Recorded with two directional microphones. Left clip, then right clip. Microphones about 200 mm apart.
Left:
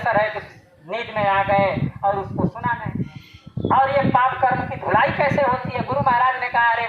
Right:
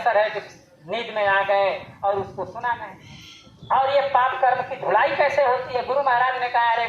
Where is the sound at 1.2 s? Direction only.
15° right (ahead or behind).